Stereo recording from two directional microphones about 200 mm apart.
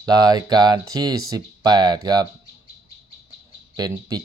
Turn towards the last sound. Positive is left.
turn(degrees=-20)  # may be behind; listen again after turning